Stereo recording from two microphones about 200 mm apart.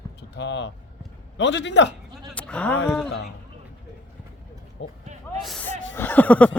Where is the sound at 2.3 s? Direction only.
5° left (ahead or behind).